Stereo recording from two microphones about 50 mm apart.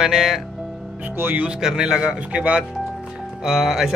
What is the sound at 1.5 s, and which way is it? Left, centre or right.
Speech, centre.